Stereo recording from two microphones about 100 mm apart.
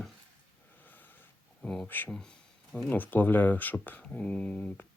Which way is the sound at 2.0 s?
5° left (ahead or behind).